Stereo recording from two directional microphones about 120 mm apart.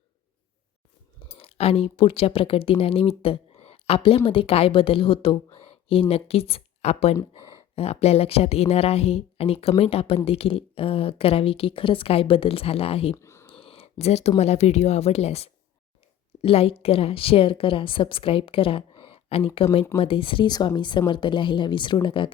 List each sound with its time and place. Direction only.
1.2 s a woman's voice: 50° left (ahead or behind)
13.1 s a sound: 25° left (ahead or behind)
13.5 s a woman's voice: 50° left (ahead or behind)